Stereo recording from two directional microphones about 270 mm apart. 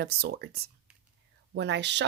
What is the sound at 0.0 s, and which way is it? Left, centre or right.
Speech, right.